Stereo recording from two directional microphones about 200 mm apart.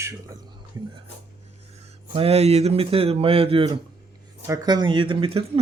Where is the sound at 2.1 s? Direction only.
30° right (ahead or behind).